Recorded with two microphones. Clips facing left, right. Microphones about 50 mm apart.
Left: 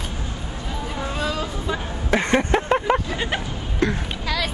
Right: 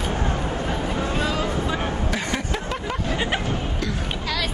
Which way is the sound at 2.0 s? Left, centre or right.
Left.